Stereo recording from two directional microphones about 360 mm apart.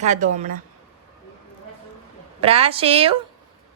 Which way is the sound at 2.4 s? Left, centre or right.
Centre.